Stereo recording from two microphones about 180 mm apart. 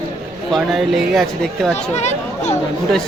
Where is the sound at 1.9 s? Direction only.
40° left (ahead or behind).